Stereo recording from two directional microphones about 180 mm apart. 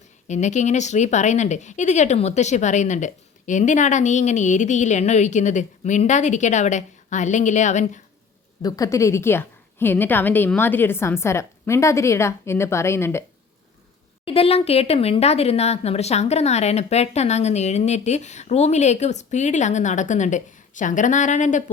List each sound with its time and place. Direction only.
0.3 s speech: 40° left (ahead or behind)
8.6 s a woman's voice: 20° left (ahead or behind)
14.3 s speech: 30° left (ahead or behind)